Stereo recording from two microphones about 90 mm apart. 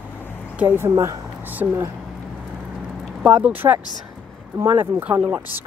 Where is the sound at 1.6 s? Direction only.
45° right (ahead or behind).